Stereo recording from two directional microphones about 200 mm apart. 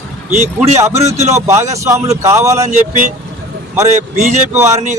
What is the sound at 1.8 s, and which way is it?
Speech, 15° right (ahead or behind).